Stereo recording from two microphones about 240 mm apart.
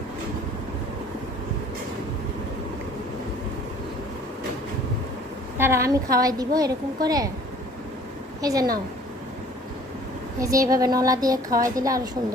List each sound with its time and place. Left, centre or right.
5.5 s a woman's voice: centre
8.4 s a woman's voice: centre
10.4 s a woman's voice: centre